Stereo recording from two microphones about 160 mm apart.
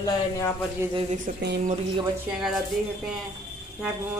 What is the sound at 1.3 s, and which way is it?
Speech, 50° right (ahead or behind).